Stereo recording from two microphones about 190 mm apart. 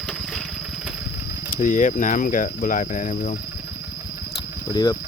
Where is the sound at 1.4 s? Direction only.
40° left (ahead or behind).